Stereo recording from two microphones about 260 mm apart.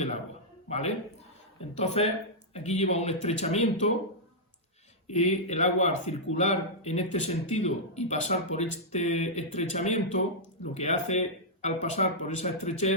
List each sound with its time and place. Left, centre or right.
0.7 s speech: left
5.0 s speech: left